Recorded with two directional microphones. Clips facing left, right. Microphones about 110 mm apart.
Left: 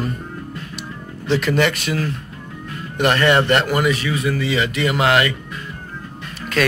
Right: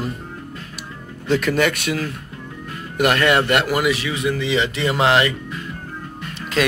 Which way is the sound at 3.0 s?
Centre (ahead or behind).